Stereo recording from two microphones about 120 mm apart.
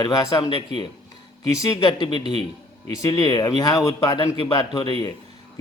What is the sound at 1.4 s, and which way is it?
Speech, 30° left (ahead or behind).